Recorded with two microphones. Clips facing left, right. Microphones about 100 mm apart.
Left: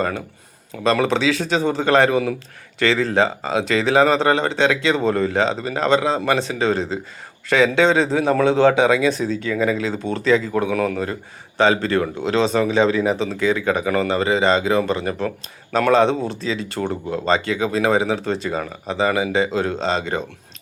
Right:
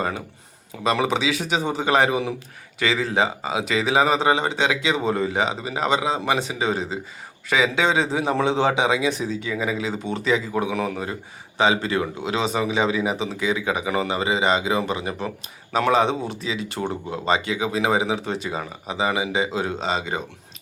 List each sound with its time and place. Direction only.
0.9 s a man's voice: 15° right (ahead or behind)